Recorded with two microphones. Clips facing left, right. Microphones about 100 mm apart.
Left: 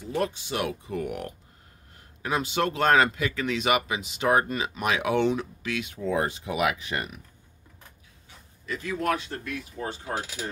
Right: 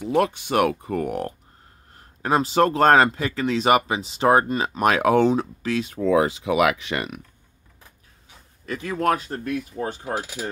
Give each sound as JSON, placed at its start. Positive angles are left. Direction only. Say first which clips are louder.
{"t": 0.0, "sound": "speech", "louder": "right 7 dB", "side_deg": -80}
{"t": 4.6, "sound": "speech", "louder": "right 7 dB", "side_deg": -50}
{"t": 5.9, "sound": "speech", "louder": "right 8 dB", "side_deg": -90}
{"t": 8.6, "sound": "speech", "louder": "right 5 dB", "side_deg": -50}